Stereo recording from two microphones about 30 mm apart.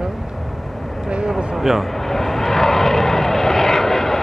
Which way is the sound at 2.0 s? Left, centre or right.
Centre.